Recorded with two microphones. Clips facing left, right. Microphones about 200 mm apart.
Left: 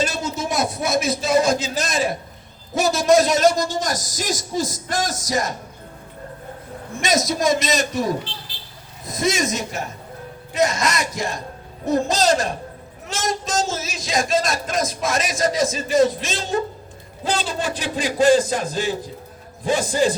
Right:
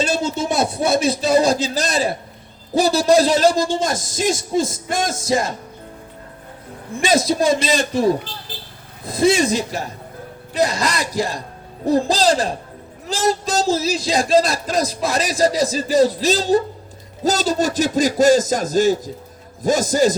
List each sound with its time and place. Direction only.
0.0 s a sound: 30° right (ahead or behind)
2.7 s a man's voice: 35° right (ahead or behind)
7.0 s a man's voice: 30° right (ahead or behind)